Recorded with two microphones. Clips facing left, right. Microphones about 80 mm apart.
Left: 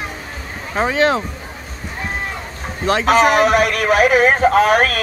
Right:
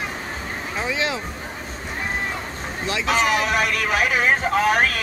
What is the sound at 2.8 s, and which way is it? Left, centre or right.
A man's voice, left.